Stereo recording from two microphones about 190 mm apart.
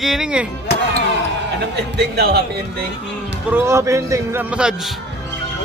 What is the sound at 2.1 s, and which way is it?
Speech, 55° right (ahead or behind).